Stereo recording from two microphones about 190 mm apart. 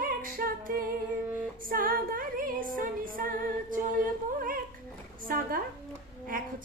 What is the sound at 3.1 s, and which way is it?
Female singing, 45° right (ahead or behind).